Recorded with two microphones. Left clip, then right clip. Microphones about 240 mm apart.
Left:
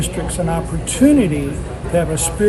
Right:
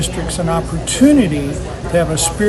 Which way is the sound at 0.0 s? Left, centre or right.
Centre.